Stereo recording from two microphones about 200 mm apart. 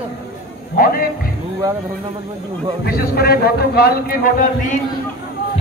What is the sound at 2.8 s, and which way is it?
Speech, 50° left (ahead or behind).